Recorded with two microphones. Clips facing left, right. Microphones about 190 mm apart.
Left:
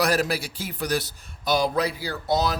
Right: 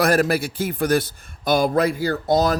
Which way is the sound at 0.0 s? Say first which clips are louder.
Right 5 dB; 55° right (ahead or behind).